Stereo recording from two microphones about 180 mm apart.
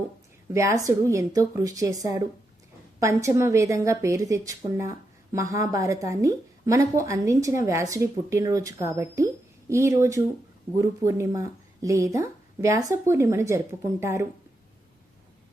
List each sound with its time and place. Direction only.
0.5 s a woman's voice: 15° right (ahead or behind)